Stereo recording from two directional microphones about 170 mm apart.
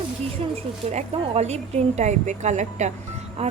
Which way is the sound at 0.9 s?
40° right (ahead or behind).